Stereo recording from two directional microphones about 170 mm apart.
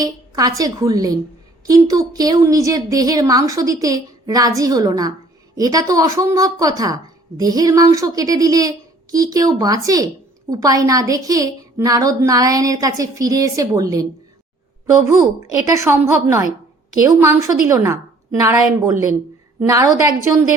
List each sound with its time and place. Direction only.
0.0 s a woman's voice: 20° right (ahead or behind)
15.1 s a woman's voice: 20° right (ahead or behind)
19.6 s a woman's voice: 20° right (ahead or behind)